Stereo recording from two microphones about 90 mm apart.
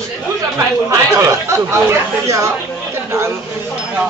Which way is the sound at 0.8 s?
35° right (ahead or behind).